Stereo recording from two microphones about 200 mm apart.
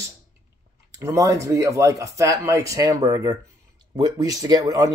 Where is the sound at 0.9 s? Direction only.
15° right (ahead or behind).